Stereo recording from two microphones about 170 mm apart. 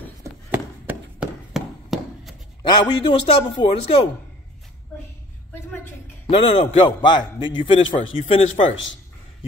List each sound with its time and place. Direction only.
0.5 s a sound: 10° right (ahead or behind)
2.6 s a man's voice: 30° left (ahead or behind)
6.2 s a man's voice: 30° left (ahead or behind)
8.2 s a man's voice: 40° left (ahead or behind)